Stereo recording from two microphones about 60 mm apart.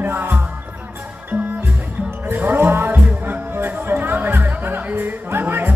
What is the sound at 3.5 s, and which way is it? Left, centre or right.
Music, right.